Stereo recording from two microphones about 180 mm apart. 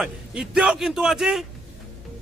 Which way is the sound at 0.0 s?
5° right (ahead or behind).